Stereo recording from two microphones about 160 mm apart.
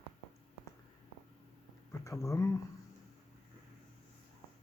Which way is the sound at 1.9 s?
20° left (ahead or behind).